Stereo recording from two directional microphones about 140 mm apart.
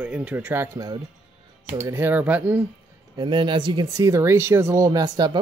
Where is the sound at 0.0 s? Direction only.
10° right (ahead or behind).